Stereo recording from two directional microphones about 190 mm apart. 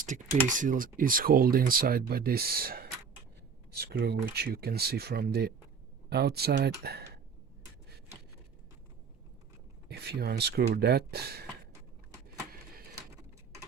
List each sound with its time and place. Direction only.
0.0 s speech: 40° right (ahead or behind)
9.9 s speech: 60° right (ahead or behind)